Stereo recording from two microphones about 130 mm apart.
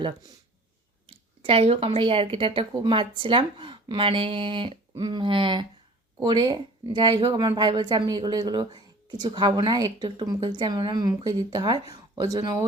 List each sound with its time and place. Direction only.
1.0 s speech: 45° right (ahead or behind); by 12.6 s 25° right (ahead or behind)